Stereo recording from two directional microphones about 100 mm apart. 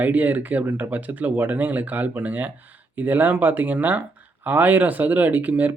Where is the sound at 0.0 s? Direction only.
15° right (ahead or behind).